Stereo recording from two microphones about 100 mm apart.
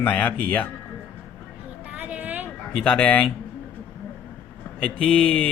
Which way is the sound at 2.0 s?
15° right (ahead or behind).